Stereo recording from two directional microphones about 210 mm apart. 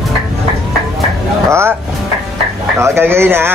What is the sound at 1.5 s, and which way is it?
Speech, 10° right (ahead or behind).